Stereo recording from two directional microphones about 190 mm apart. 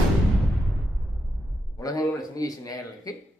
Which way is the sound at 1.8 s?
20° left (ahead or behind).